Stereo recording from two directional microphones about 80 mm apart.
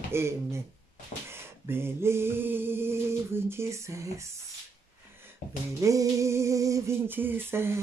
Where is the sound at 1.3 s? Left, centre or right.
Right.